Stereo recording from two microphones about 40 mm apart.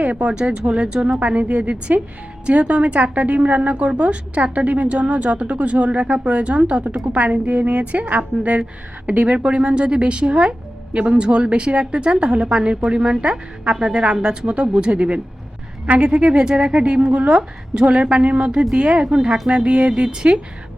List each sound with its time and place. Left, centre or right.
0.0 s a woman's voice: right